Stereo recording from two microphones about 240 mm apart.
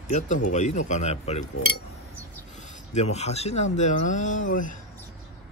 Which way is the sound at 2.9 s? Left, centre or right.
Left.